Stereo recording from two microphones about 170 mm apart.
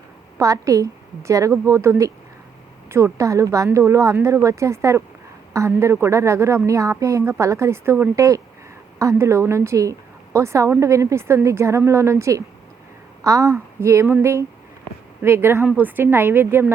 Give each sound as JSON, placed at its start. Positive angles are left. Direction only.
{"t": 0.3, "sound": "a woman's voice", "side_deg": -20}